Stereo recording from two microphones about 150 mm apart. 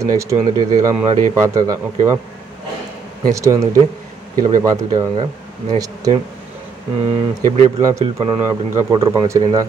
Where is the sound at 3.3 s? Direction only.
20° right (ahead or behind).